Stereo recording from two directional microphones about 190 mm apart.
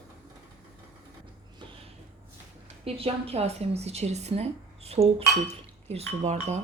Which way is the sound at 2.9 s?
30° right (ahead or behind).